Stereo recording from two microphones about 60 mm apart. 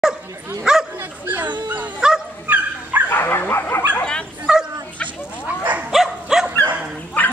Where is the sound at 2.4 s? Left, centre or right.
Right.